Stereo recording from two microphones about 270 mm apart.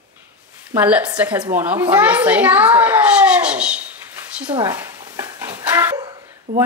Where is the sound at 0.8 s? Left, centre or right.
Centre.